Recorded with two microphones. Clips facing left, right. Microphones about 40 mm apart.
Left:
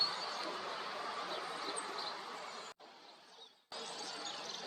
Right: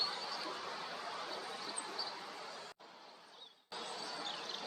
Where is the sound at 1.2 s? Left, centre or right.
Left.